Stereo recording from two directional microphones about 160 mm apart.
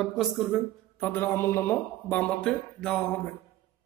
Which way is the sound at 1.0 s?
10° left (ahead or behind).